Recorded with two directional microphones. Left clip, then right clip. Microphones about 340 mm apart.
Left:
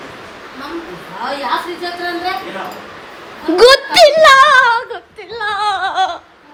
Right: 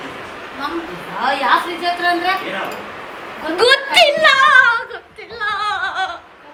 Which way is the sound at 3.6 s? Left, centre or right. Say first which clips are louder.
Left 5 dB; centre.